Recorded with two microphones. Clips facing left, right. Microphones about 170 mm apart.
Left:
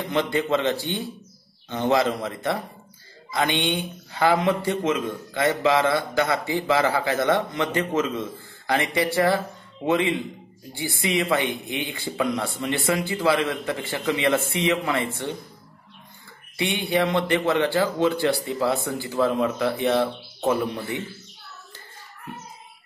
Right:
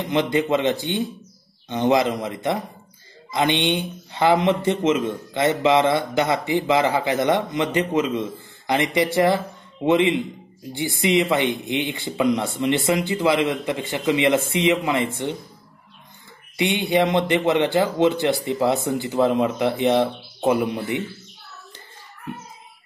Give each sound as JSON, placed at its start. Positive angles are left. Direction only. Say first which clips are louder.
{"t": 0.0, "sound": "a man's voice", "louder": "right 3 dB", "side_deg": -20}
{"t": 16.5, "sound": "speech", "louder": "right 4 dB", "side_deg": -20}